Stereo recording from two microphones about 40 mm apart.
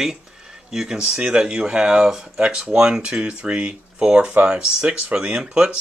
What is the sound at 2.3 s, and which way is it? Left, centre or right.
Speech, right.